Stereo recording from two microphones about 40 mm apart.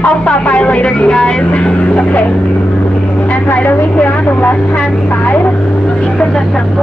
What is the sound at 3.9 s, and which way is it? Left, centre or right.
Speech, left.